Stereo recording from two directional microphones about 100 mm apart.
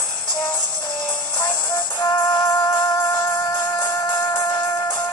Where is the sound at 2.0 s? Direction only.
40° left (ahead or behind).